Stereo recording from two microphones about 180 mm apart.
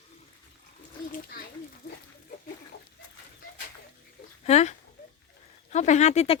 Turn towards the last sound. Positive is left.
turn(degrees=35)  # may be behind; listen again after turning